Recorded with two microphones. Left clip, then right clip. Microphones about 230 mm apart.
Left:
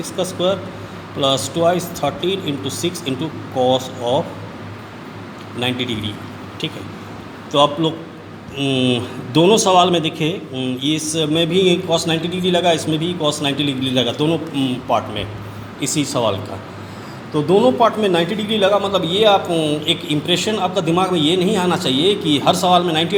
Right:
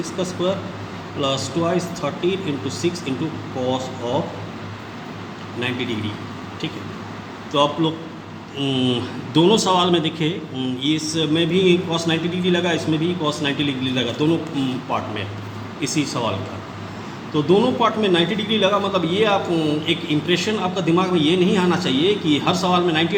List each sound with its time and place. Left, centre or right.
0.2 s a man's voice: left
5.5 s a man's voice: left
7.5 s a man's voice: left
8.5 s a man's voice: centre; by 14.3 s left
15.8 s a man's voice: left
17.3 s a man's voice: left